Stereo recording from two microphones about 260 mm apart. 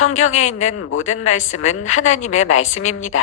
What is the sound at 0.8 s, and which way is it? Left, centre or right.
Speech, left.